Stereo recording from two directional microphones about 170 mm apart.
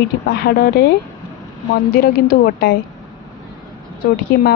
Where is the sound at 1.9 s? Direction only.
60° left (ahead or behind).